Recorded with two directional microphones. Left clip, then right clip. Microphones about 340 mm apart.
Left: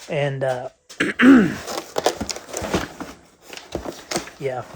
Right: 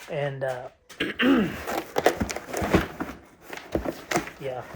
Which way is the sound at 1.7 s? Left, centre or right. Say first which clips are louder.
Right 1 dB; centre.